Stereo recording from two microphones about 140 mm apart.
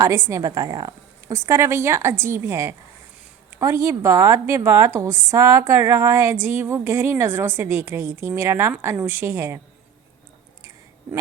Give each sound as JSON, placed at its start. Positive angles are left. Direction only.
{"t": 0.0, "sound": "a woman's voice", "side_deg": -20}